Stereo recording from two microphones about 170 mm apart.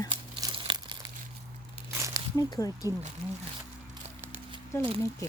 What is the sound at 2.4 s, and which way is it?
Speech, 20° left (ahead or behind).